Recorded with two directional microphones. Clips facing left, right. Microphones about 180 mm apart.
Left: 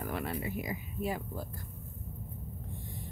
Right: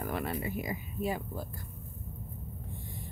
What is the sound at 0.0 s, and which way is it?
Speech, 50° right (ahead or behind).